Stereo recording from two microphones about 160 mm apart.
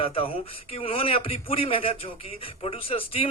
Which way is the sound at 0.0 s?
35° left (ahead or behind).